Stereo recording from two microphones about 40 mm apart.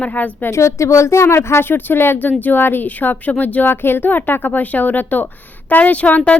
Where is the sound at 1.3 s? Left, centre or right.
Left.